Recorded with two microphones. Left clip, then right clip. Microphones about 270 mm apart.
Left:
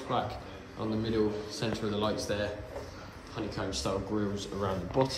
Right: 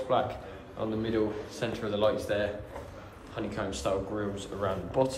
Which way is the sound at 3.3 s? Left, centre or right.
Centre.